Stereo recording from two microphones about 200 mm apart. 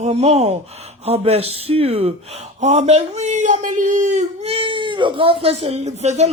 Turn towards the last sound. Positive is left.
turn(degrees=-35)  # may be behind; listen again after turning